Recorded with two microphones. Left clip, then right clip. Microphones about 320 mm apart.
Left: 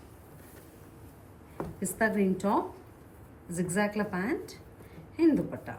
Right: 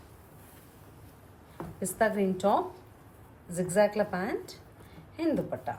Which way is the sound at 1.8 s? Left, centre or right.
Right.